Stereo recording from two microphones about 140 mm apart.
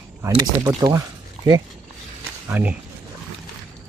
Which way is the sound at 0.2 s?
20° right (ahead or behind).